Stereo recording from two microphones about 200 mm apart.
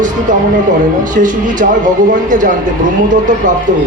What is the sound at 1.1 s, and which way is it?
Speech, 40° right (ahead or behind).